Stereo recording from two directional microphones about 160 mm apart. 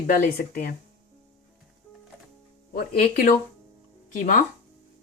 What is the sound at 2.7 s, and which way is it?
Speech, 60° left (ahead or behind).